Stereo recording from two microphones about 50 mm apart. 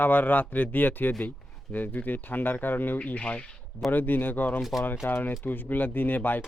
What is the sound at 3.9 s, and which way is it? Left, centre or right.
Speech, left.